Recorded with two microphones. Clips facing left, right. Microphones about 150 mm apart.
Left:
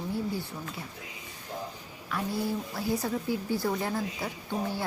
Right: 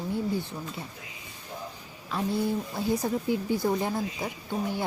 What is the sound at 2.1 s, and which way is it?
A woman's voice, 25° right (ahead or behind).